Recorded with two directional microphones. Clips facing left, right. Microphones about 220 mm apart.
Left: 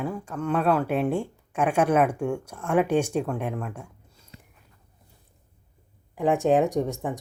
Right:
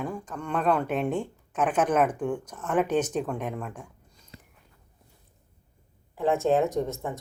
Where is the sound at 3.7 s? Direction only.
10° left (ahead or behind).